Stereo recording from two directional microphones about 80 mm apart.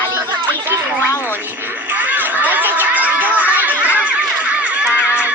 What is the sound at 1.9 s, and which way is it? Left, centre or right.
Music, right.